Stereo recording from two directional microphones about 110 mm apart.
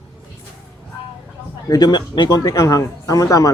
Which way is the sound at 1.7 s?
35° left (ahead or behind).